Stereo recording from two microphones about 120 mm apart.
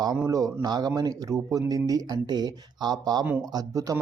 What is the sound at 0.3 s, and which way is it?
Speech, 30° right (ahead or behind).